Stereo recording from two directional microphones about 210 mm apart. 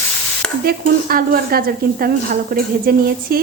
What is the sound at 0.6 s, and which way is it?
Speech, 45° right (ahead or behind).